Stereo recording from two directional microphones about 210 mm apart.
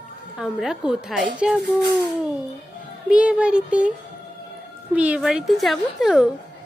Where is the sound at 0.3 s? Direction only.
Centre (ahead or behind).